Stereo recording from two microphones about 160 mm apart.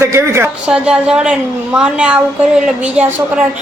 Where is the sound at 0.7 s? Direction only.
5° right (ahead or behind).